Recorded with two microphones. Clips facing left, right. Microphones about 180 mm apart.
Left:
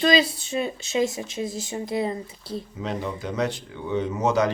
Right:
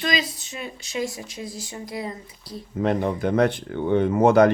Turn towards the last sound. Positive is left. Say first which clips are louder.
# right 7 dB
turn(degrees=-55)  # may be behind; listen again after turning